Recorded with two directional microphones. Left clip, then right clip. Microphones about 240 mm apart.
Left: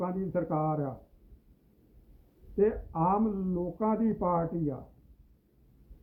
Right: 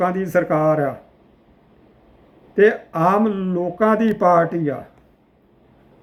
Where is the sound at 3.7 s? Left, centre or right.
Centre.